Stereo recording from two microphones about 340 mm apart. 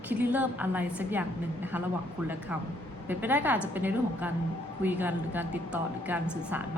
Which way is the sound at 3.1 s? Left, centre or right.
Centre.